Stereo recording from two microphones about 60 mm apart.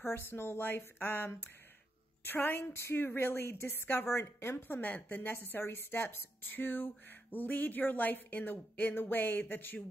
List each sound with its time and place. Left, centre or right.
0.0 s a woman's voice: left